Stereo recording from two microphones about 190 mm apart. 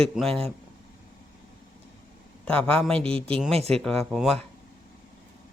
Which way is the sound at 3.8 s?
Centre (ahead or behind).